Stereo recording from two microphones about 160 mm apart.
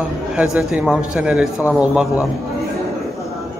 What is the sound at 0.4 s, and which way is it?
A man's voice, 5° right (ahead or behind).